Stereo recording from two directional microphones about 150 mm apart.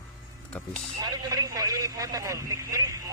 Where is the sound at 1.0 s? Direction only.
25° right (ahead or behind).